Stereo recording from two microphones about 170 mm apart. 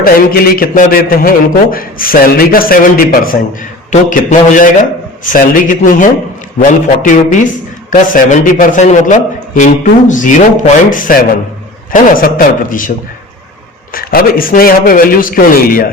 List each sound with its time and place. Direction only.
0.0 s a man's voice: 60° left (ahead or behind)
13.9 s a man's voice: 60° left (ahead or behind)